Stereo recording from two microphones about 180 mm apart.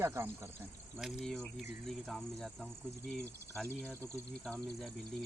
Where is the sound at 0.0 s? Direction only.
15° right (ahead or behind).